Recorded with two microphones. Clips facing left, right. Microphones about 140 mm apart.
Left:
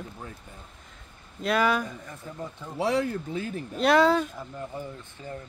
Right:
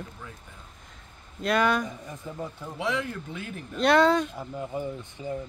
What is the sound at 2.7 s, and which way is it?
Speech, 35° left (ahead or behind).